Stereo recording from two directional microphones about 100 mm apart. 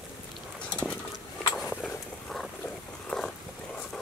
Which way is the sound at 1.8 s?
5° left (ahead or behind).